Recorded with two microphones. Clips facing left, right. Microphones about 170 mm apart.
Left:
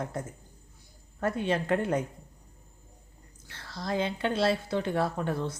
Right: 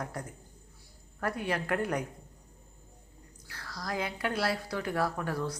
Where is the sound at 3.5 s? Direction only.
25° left (ahead or behind).